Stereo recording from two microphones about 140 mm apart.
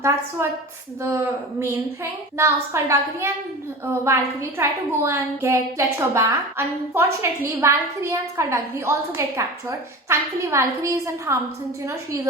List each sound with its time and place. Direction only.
1.0 s a woman's voice: 20° right (ahead or behind)